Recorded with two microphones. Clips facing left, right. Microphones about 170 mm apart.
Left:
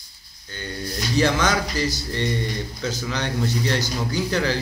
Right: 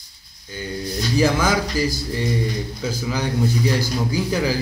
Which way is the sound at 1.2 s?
5° right (ahead or behind).